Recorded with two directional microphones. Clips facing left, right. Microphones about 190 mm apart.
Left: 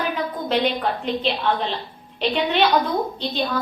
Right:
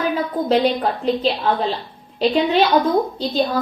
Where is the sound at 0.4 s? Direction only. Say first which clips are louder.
Right 4 dB; 35° right (ahead or behind).